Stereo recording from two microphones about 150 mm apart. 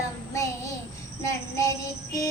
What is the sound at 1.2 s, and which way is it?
Child singing, 20° left (ahead or behind).